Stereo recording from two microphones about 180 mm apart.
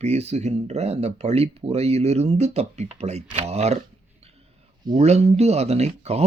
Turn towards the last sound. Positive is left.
turn(degrees=-35)  # may be behind; listen again after turning